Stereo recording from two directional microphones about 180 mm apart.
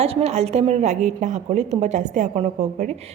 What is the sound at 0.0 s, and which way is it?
A woman's voice, 35° right (ahead or behind).